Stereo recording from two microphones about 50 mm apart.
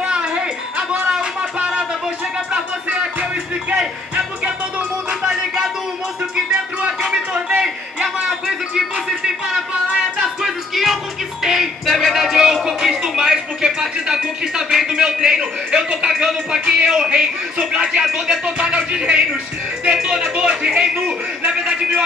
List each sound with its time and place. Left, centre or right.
0.1 s music: centre
1.0 s a sound: centre
2.5 s music: right
5.2 s music: centre
7.0 s a sound: centre
10.4 s music: centre
12.6 s speech: centre
19.9 s a man's voice: centre